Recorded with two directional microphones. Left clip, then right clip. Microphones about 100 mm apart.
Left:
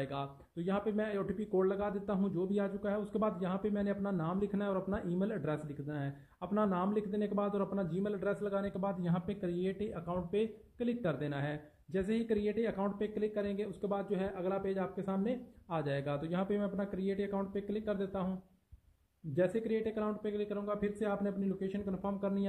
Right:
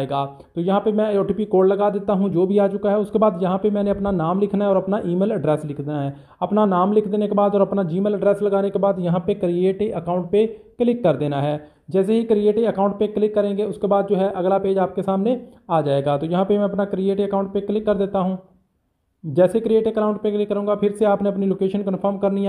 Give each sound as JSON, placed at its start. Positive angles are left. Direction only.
{"t": 0.0, "sound": "speech", "side_deg": -25}
{"t": 19.3, "sound": "speech", "side_deg": -30}